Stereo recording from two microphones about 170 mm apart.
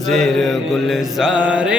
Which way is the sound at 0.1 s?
Centre (ahead or behind).